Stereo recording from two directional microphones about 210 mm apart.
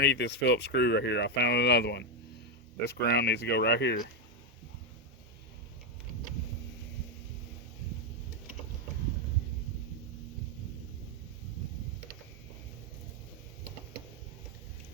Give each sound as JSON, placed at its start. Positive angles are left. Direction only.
{"t": 0.0, "sound": "speech", "side_deg": 55}